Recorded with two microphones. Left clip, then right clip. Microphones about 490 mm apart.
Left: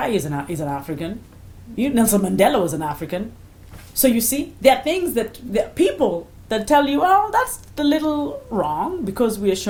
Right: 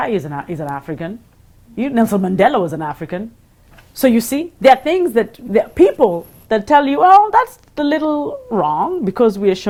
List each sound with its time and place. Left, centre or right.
0.0 s a woman's voice: right
3.9 s a woman's voice: right